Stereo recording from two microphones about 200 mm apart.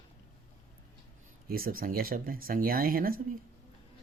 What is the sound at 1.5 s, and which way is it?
A man's voice, 45° right (ahead or behind).